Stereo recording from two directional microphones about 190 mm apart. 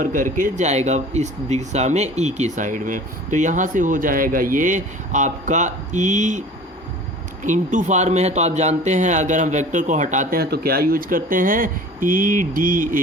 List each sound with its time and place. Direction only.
0.0 s speech: 45° right (ahead or behind)
7.4 s speech: 40° right (ahead or behind)